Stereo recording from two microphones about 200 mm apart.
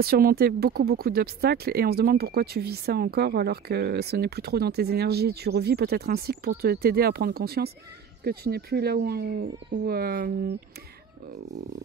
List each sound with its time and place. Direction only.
0.0 s speech: 45° right (ahead or behind)